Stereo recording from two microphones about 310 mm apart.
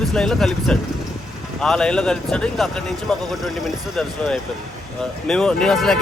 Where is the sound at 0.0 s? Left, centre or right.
Centre.